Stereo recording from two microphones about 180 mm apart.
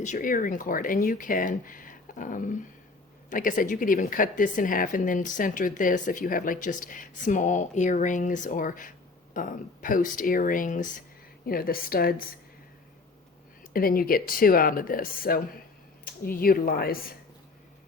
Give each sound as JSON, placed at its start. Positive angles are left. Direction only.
{"t": 0.0, "sound": "speech", "side_deg": 45}
{"t": 13.7, "sound": "speech", "side_deg": 55}